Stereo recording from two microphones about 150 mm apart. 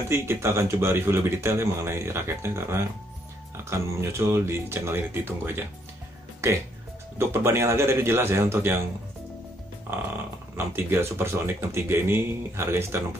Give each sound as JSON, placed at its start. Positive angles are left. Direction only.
{"t": 0.1, "sound": "speech", "side_deg": -15}
{"t": 7.2, "sound": "speech", "side_deg": -15}
{"t": 9.8, "sound": "speech", "side_deg": -15}